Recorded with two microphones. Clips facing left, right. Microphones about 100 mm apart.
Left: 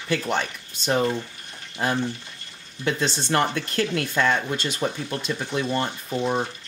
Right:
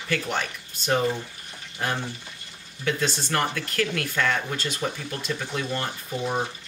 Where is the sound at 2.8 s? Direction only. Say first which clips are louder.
Left 2 dB; 25° left (ahead or behind).